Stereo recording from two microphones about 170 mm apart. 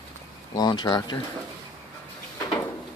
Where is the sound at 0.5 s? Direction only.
25° left (ahead or behind).